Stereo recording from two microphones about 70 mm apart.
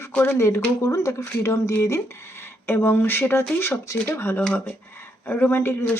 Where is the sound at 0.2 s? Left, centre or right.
Left.